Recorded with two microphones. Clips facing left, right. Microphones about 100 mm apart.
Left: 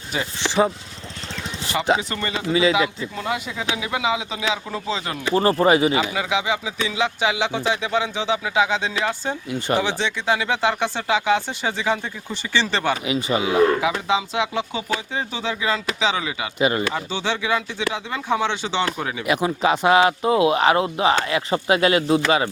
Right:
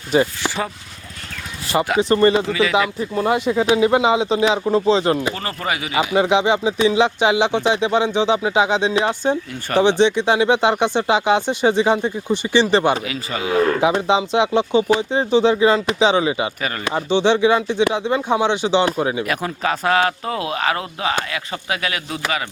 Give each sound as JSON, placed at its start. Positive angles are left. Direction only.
{"t": 0.4, "sound": "speech", "side_deg": 20}
{"t": 2.0, "sound": "speech", "side_deg": -35}
{"t": 2.5, "sound": "speech", "side_deg": 20}
{"t": 3.2, "sound": "speech", "side_deg": -35}
{"t": 5.3, "sound": "speech", "side_deg": 30}
{"t": 6.1, "sound": "speech", "side_deg": -25}
{"t": 9.5, "sound": "speech", "side_deg": 15}
{"t": 9.8, "sound": "speech", "side_deg": -20}
{"t": 13.1, "sound": "speech", "side_deg": 20}
{"t": 13.8, "sound": "speech", "side_deg": -25}
{"t": 16.6, "sound": "speech", "side_deg": 20}
{"t": 16.9, "sound": "speech", "side_deg": -25}
{"t": 19.2, "sound": "speech", "side_deg": 10}